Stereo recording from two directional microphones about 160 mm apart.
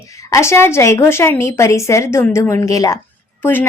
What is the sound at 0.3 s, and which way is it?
A woman's voice, 20° left (ahead or behind).